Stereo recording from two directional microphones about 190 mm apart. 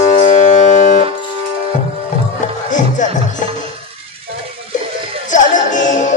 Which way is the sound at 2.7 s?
40° left (ahead or behind).